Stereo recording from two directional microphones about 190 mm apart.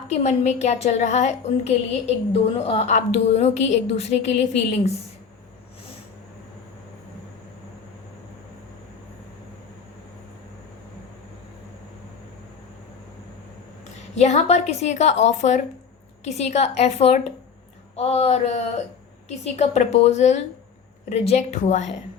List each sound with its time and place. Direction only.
0.1 s a woman's voice: 35° left (ahead or behind)
14.2 s a woman's voice: 35° left (ahead or behind)